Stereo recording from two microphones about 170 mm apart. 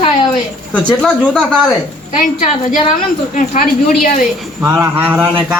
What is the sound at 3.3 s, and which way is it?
Speech, 45° left (ahead or behind).